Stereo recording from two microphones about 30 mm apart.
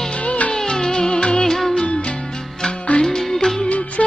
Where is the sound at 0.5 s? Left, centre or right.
Centre.